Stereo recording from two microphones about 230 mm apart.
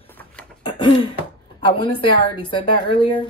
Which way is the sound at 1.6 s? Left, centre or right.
Left.